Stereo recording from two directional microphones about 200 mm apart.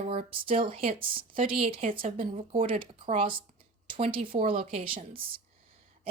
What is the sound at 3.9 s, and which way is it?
Speech, 45° right (ahead or behind).